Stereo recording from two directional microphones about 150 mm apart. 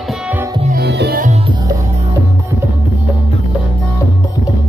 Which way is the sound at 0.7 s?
90° right.